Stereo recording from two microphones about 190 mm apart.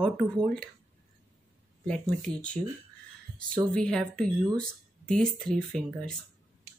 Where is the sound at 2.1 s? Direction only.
5° left (ahead or behind).